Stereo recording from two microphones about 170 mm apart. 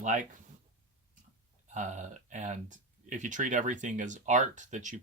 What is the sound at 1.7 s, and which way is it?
Speech, 45° right (ahead or behind).